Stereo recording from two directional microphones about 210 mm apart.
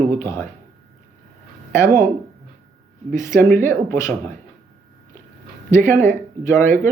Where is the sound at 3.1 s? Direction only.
15° left (ahead or behind).